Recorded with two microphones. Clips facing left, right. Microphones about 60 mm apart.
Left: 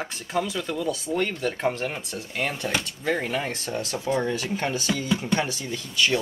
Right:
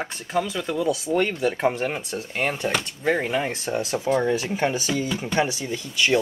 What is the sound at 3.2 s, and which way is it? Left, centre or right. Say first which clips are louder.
Speech: right 3 dB; centre.